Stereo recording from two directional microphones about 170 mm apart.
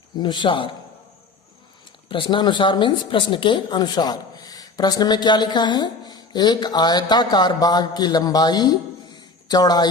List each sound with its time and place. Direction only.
0.2 s speech: 25° left (ahead or behind)
2.0 s speech: 30° left (ahead or behind)